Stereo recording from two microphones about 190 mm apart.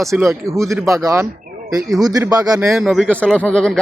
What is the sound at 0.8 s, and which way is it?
Speech, 15° right (ahead or behind).